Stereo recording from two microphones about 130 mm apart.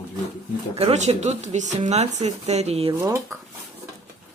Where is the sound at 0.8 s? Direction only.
55° right (ahead or behind).